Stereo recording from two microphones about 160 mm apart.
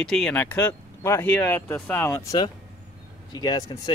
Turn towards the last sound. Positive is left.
turn(degrees=25)  # may be behind; listen again after turning